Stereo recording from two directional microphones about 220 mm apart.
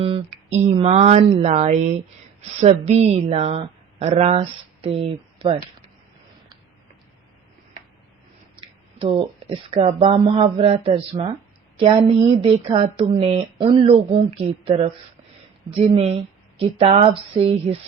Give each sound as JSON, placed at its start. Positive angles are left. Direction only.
{"t": 0.0, "sound": "a woman's voice", "side_deg": -30}
{"t": 9.0, "sound": "a woman's voice", "side_deg": -25}